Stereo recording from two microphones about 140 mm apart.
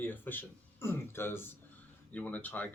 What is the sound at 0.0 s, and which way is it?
Speech, 15° left (ahead or behind).